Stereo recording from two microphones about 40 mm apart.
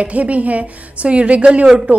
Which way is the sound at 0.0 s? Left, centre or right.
Right.